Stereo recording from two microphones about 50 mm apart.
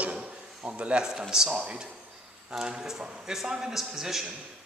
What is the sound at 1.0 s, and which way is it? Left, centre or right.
Speech, centre.